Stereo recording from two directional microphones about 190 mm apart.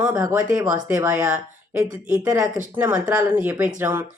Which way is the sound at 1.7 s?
15° right (ahead or behind).